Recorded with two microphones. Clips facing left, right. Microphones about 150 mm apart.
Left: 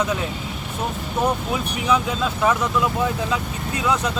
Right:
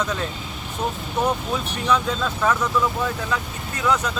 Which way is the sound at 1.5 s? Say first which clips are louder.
Left 1 dB; 10° left (ahead or behind).